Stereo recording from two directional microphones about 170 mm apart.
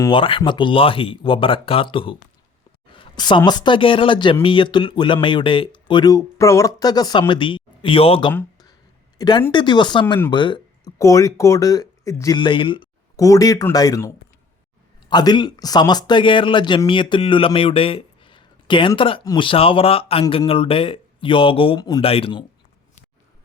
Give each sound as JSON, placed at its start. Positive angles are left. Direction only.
{"t": 0.0, "sound": "speech", "side_deg": 30}
{"t": 10.3, "sound": "a sound", "side_deg": 30}
{"t": 10.9, "sound": "speech", "side_deg": 20}
{"t": 12.4, "sound": "speech", "side_deg": 30}
{"t": 15.1, "sound": "speech", "side_deg": 25}